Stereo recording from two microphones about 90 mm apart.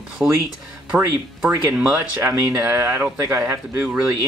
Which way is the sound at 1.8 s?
30° right (ahead or behind).